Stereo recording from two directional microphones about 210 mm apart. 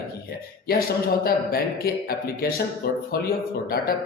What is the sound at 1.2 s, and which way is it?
Speech, 45° left (ahead or behind).